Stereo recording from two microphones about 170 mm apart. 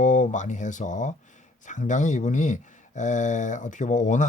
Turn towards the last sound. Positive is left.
turn(degrees=50)  # may be behind; listen again after turning